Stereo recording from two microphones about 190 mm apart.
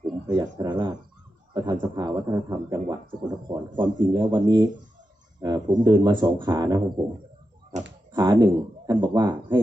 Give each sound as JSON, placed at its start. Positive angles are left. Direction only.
{"t": 0.3, "sound": "speech", "side_deg": -20}
{"t": 8.1, "sound": "speech", "side_deg": -20}